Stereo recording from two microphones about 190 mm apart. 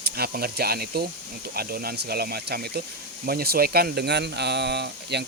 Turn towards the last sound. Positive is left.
turn(degrees=-60)  # may be behind; listen again after turning